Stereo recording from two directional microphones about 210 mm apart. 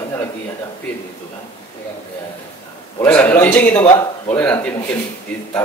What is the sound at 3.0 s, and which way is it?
Speech, 10° left (ahead or behind).